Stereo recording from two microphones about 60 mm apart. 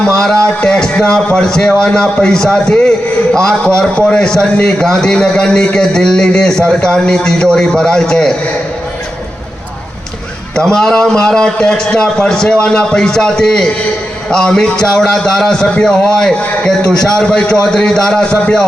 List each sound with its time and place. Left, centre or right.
0.1 s a man's voice: centre
3.9 s a man's voice: centre
10.5 s a man's voice: centre